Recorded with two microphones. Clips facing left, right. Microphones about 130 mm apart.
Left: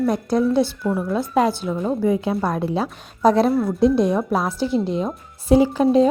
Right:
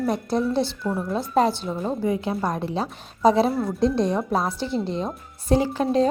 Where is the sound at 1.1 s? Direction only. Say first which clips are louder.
Left 1 dB; 30° right (ahead or behind).